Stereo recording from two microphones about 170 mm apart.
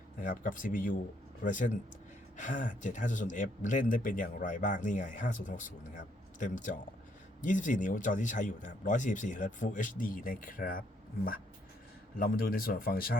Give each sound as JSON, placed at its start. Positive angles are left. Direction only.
{"t": 0.2, "sound": "speech", "side_deg": 50}
{"t": 12.1, "sound": "speech", "side_deg": 60}